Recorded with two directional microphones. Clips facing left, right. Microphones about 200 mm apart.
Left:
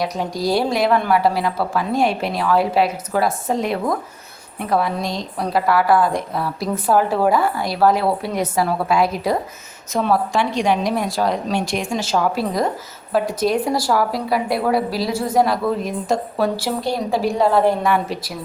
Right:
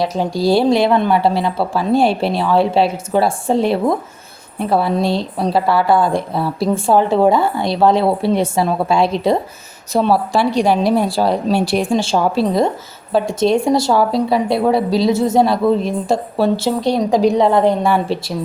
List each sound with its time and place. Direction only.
0.0 s a woman's voice: 30° right (ahead or behind)